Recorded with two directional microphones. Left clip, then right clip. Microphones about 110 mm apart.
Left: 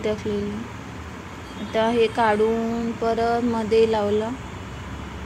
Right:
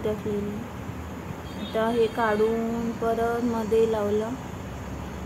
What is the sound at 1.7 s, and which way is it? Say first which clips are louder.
Speech: left 4 dB; 35° left (ahead or behind).